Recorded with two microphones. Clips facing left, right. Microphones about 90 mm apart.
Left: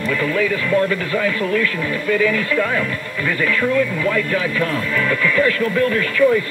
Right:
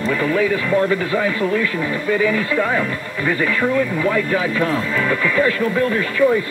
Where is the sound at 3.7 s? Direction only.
30° right (ahead or behind).